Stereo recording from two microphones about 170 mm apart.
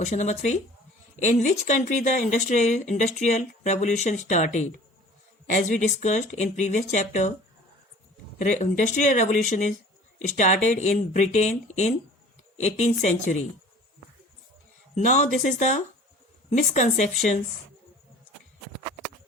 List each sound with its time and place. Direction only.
0.0 s speech: 45° left (ahead or behind)
8.4 s speech: 45° left (ahead or behind)
14.9 s speech: 45° left (ahead or behind)